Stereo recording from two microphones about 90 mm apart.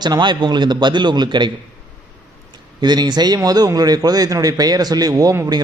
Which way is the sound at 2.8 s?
55° right (ahead or behind).